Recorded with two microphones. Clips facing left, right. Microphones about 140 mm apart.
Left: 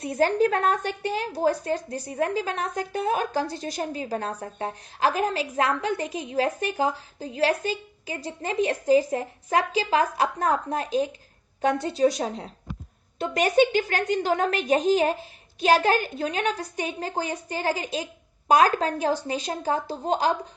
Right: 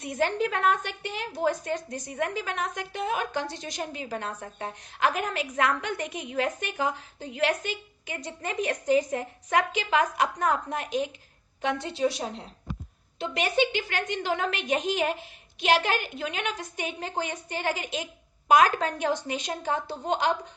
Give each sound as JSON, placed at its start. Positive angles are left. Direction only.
{"t": 0.0, "sound": "a woman's voice", "side_deg": 35}